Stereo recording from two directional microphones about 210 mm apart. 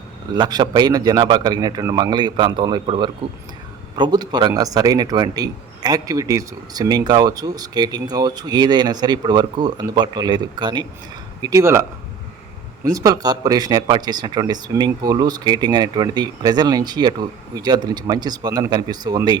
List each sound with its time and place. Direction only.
0.3 s speech: 20° right (ahead or behind)